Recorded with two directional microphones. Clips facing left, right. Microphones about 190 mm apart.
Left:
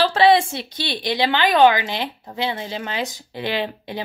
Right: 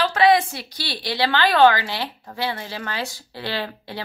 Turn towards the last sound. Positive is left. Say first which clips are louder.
# left 4 dB
turn(degrees=20)  # may be behind; listen again after turning